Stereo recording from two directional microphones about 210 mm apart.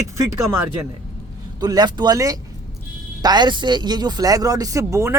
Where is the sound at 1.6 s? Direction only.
20° right (ahead or behind).